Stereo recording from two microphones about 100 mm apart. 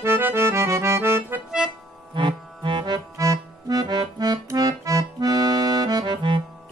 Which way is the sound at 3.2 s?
35° right (ahead or behind).